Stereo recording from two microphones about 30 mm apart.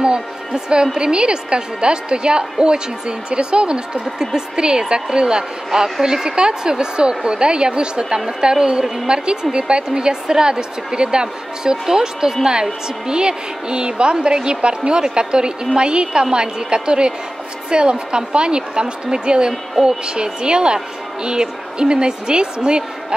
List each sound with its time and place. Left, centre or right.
0.9 s speech: right
4.2 s a woman's voice: right
5.7 s a woman's voice: centre